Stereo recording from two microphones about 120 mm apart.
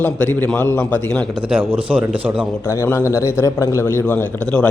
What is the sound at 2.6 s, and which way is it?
A man's voice, 20° left (ahead or behind).